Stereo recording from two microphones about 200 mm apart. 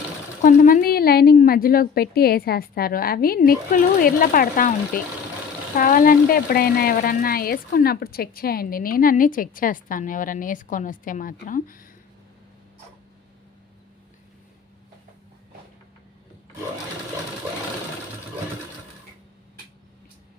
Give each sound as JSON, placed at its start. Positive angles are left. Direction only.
{"t": 0.4, "sound": "a woman's voice", "side_deg": 40}